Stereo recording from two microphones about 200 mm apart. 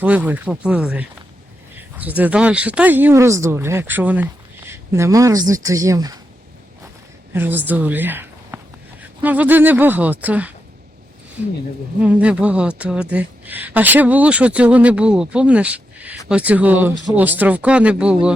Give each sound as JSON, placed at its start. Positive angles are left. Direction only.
{"t": 0.0, "sound": "speech", "side_deg": -10}
{"t": 7.3, "sound": "speech", "side_deg": -10}
{"t": 12.0, "sound": "speech", "side_deg": -5}